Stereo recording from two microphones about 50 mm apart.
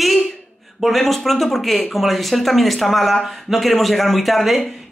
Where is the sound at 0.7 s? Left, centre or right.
Centre.